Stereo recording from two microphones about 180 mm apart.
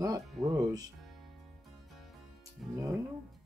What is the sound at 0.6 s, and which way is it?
Music, 20° right (ahead or behind).